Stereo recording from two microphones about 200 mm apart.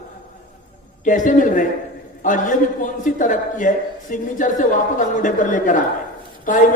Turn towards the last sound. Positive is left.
turn(degrees=40)  # may be behind; listen again after turning